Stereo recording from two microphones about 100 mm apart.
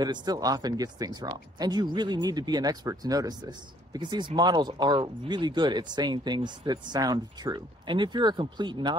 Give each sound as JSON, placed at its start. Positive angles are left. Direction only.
{"t": 0.0, "sound": "speech", "side_deg": -45}